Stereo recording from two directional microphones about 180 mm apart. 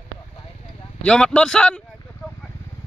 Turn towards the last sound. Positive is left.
turn(degrees=5)  # may be behind; listen again after turning